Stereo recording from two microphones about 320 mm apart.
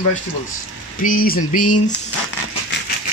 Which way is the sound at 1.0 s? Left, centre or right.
Left.